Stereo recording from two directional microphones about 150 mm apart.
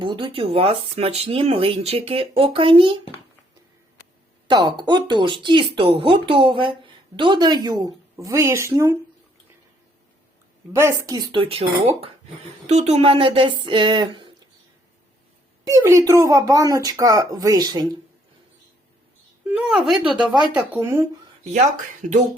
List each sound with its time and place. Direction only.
0.0 s speech: 35° right (ahead or behind)
4.4 s speech: 30° right (ahead or behind)
10.7 s speech: 15° right (ahead or behind)
11.0 s speech: 30° right (ahead or behind)
15.6 s speech: 20° right (ahead or behind)
19.5 s speech: 5° right (ahead or behind)
20.3 s speech: 30° right (ahead or behind)
20.7 s speech: 15° right (ahead or behind)
21.5 s speech: 55° right (ahead or behind)